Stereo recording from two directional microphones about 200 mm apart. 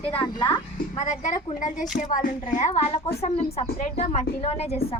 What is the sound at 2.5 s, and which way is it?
A woman's voice, 35° left (ahead or behind).